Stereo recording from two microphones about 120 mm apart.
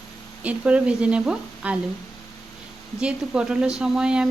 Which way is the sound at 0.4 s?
10° right (ahead or behind).